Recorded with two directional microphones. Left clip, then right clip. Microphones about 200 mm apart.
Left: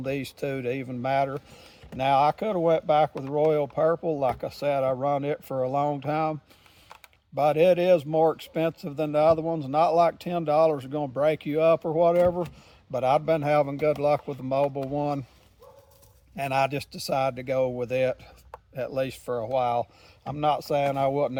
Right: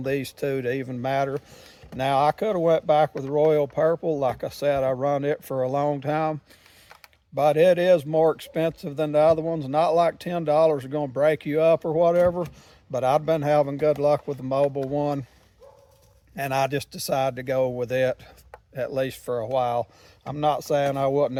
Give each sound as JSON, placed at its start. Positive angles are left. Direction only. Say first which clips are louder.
{"t": 0.0, "sound": "a man's voice", "louder": "right 4 dB", "side_deg": -40}
{"t": 16.3, "sound": "a man's voice", "louder": "right 1 dB", "side_deg": -40}